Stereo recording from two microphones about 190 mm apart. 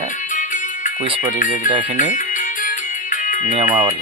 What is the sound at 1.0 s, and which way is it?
Speech, 30° right (ahead or behind).